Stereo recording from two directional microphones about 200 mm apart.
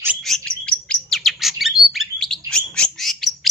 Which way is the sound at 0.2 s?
5° left (ahead or behind).